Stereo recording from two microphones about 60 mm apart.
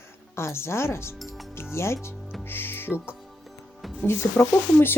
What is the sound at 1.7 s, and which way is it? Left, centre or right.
Speech, left.